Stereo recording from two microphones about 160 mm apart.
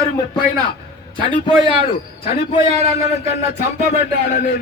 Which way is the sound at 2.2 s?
35° left (ahead or behind).